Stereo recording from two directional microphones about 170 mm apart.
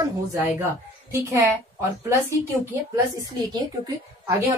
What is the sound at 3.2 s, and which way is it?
Speech, 20° right (ahead or behind).